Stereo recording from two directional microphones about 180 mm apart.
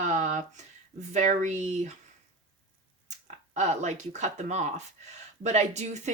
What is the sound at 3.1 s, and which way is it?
Speech, 40° right (ahead or behind).